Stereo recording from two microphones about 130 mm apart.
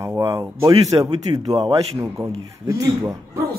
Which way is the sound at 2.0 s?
20° right (ahead or behind).